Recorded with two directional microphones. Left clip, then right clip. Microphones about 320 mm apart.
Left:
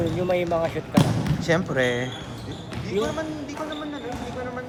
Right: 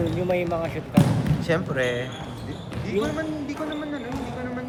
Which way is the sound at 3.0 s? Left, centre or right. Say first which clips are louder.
Even; left.